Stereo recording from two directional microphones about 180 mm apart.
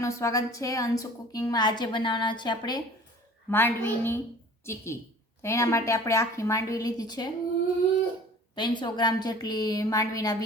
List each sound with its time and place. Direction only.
0.0 s a woman's voice: 20° left (ahead or behind)
3.5 s a woman's voice: 10° left (ahead or behind)
8.5 s a woman's voice: 25° left (ahead or behind)